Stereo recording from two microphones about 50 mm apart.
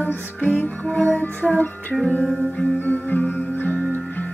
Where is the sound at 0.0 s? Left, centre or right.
Left.